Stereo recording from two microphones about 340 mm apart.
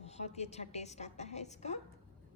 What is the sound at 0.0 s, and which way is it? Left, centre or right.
A woman's voice, centre.